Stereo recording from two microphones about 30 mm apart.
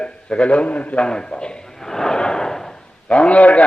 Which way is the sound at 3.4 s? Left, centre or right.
Left.